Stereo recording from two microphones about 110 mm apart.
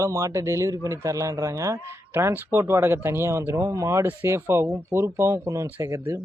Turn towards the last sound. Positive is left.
turn(degrees=-25)  # may be behind; listen again after turning